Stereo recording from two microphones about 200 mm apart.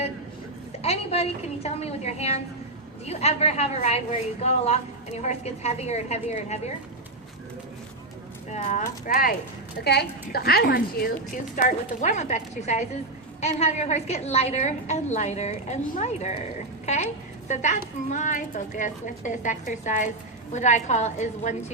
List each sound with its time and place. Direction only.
0.8 s a woman's voice: 30° left (ahead or behind)
8.4 s a woman's voice: 35° left (ahead or behind)
9.8 s a woman's voice: 55° left (ahead or behind); by 21.5 s 35° left (ahead or behind)